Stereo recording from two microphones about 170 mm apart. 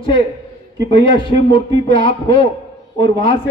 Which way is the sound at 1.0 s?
30° left (ahead or behind).